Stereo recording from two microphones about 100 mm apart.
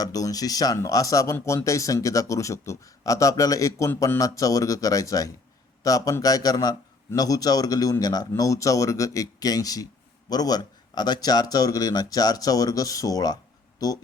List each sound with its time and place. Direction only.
0.0 s speech: 35° left (ahead or behind)